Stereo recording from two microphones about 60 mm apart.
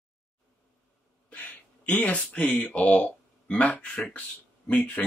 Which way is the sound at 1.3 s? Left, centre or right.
Left.